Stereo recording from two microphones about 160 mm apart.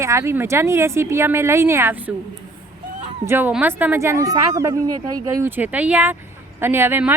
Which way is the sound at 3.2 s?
15° right (ahead or behind).